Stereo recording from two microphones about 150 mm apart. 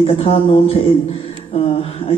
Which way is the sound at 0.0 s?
40° left (ahead or behind).